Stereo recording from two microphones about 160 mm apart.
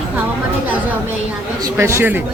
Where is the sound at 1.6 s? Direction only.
15° right (ahead or behind).